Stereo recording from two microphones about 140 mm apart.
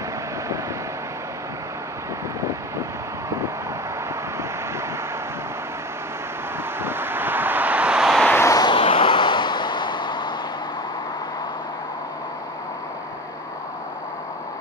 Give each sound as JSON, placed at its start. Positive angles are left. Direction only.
{"t": 3.3, "sound": "vehicle", "side_deg": -20}
{"t": 6.8, "sound": "vehicle", "side_deg": -15}
{"t": 8.3, "sound": "a sound", "side_deg": 20}
{"t": 8.7, "sound": "vehicle", "side_deg": 40}